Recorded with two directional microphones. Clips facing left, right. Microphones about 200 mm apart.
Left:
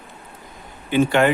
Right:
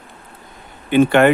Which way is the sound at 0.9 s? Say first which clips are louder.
Right 5 dB; 60° right (ahead or behind).